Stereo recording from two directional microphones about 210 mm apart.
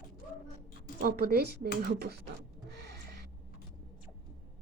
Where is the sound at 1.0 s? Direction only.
45° right (ahead or behind).